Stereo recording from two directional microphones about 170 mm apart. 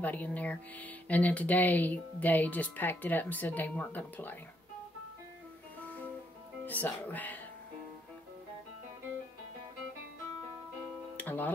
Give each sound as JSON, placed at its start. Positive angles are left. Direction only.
{"t": 0.0, "sound": "speech", "side_deg": 10}
{"t": 5.8, "sound": "music", "side_deg": 10}
{"t": 6.6, "sound": "speech", "side_deg": 10}
{"t": 11.1, "sound": "music", "side_deg": 10}